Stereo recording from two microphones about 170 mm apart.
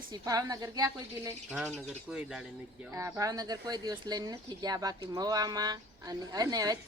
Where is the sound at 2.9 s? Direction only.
20° right (ahead or behind).